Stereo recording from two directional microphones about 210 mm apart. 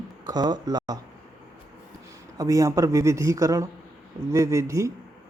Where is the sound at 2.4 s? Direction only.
15° right (ahead or behind).